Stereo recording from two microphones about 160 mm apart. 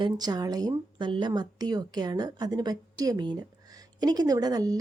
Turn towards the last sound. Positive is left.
turn(degrees=-25)  # may be behind; listen again after turning